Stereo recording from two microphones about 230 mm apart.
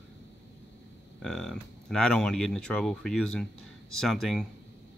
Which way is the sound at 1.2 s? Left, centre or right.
Centre.